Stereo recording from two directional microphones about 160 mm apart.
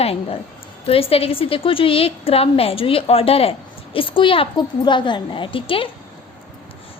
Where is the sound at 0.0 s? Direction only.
40° left (ahead or behind).